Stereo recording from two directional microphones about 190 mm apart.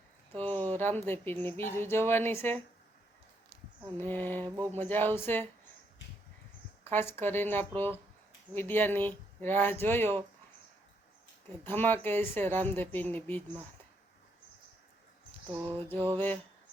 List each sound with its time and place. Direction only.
0.3 s speech: 10° left (ahead or behind)
3.9 s speech: 10° left (ahead or behind)
4.4 s speech: 20° right (ahead or behind)
4.8 s speech: 10° left (ahead or behind)
6.8 s speech: 10° left (ahead or behind)
11.8 s speech: 10° left (ahead or behind)
15.4 s a sound: 10° right (ahead or behind)
16.1 s speech: 10° left (ahead or behind)